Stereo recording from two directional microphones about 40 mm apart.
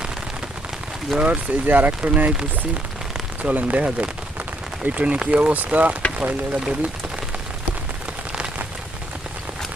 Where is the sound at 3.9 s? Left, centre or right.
Right.